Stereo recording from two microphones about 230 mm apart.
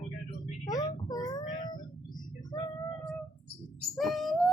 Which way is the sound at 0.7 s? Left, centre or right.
Centre.